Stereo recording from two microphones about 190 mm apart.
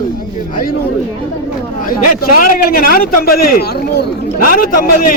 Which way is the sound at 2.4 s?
50° left (ahead or behind).